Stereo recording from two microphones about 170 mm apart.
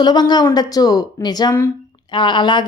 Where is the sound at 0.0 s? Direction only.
25° left (ahead or behind).